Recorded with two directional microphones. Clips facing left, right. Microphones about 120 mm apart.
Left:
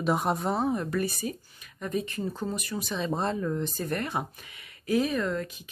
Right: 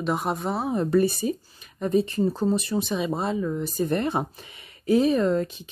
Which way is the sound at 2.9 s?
10° right (ahead or behind).